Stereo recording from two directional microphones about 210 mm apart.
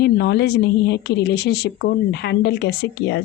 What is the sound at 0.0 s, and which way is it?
A woman's voice, 50° left (ahead or behind).